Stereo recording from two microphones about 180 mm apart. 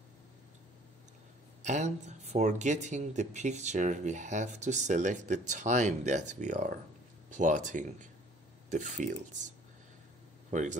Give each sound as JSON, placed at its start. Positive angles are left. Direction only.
{"t": 1.6, "sound": "speech", "side_deg": -40}
{"t": 10.5, "sound": "speech", "side_deg": -45}